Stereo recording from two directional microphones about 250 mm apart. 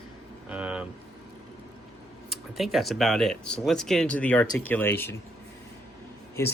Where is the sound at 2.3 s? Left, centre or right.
Centre.